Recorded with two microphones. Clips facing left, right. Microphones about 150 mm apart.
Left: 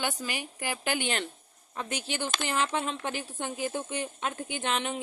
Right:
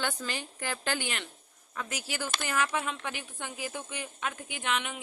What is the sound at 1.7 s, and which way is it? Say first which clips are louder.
Speech: left 3 dB; 30° left (ahead or behind).